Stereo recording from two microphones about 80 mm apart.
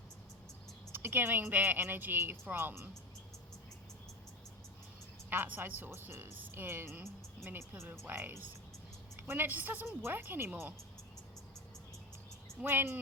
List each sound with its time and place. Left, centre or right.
0.9 s a woman's voice: right
5.3 s a woman's voice: right
12.6 s a woman's voice: right